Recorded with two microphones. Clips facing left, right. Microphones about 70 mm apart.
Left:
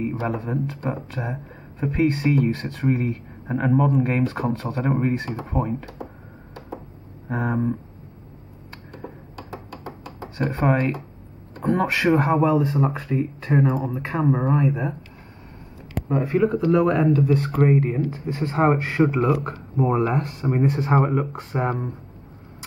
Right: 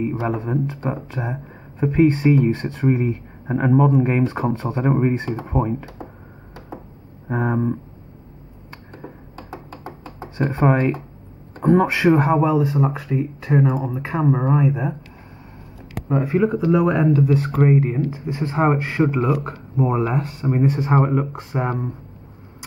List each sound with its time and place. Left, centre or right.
0.3 s speech: centre
0.7 s speech: right
4.2 s speech: centre
7.2 s speech: centre
9.5 s knock: right
10.7 s speech: centre